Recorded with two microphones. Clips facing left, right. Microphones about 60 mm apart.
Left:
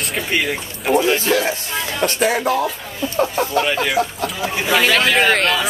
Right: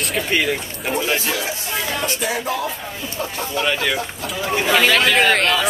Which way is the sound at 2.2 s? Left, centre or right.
Left.